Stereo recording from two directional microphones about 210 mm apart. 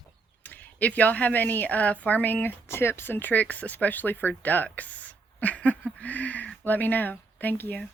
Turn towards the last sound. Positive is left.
turn(degrees=10)  # may be behind; listen again after turning